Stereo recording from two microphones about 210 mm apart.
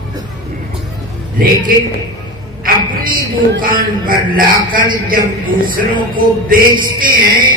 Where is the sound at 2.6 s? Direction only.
40° right (ahead or behind).